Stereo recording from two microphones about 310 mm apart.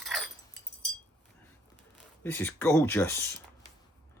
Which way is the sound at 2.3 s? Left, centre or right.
Centre.